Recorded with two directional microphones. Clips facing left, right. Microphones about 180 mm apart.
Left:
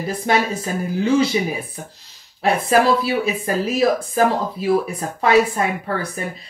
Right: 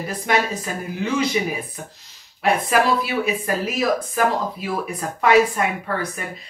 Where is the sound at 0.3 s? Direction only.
30° left (ahead or behind).